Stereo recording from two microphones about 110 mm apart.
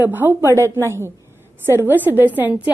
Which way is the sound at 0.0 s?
20° right (ahead or behind).